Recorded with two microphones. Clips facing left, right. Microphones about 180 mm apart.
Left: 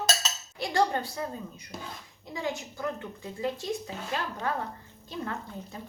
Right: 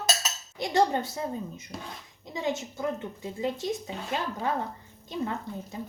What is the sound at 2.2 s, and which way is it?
Speech, 20° right (ahead or behind).